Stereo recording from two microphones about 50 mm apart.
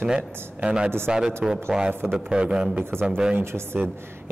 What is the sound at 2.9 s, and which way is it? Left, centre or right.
Speech, right.